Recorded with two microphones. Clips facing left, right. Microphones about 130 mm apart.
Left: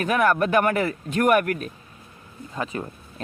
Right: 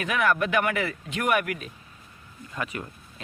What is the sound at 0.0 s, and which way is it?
Speech, 45° left (ahead or behind).